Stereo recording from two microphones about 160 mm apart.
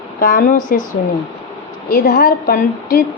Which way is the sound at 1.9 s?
70° left (ahead or behind).